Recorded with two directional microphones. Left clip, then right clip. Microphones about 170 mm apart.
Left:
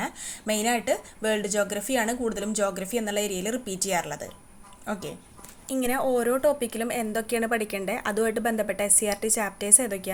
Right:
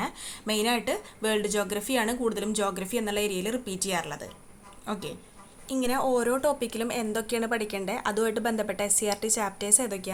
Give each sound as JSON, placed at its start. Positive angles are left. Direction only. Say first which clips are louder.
{"t": 0.0, "sound": "a woman's voice", "louder": "left 1 dB", "side_deg": 10}